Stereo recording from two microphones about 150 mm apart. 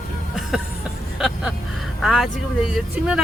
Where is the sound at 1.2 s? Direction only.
Centre (ahead or behind).